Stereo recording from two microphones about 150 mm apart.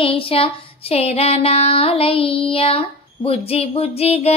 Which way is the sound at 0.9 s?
40° left (ahead or behind).